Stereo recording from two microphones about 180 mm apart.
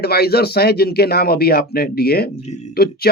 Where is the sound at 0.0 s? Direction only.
60° left (ahead or behind).